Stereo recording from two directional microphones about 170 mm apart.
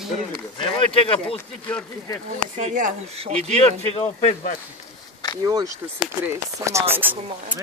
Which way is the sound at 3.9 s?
35° left (ahead or behind).